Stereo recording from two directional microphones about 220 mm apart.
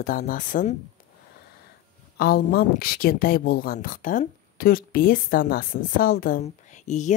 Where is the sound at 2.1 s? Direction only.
45° left (ahead or behind).